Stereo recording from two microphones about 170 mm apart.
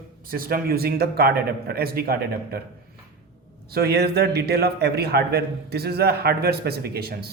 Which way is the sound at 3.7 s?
70° right (ahead or behind).